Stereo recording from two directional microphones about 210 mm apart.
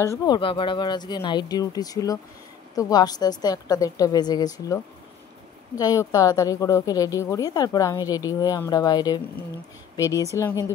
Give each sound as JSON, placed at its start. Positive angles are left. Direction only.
{"t": 0.2, "sound": "a woman's voice", "side_deg": 20}
{"t": 5.8, "sound": "a woman's voice", "side_deg": 15}